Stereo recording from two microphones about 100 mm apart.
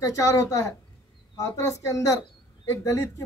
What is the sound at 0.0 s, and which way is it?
A man's voice, 35° left (ahead or behind).